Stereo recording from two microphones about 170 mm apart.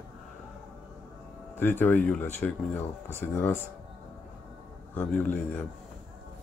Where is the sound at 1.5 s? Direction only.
10° left (ahead or behind).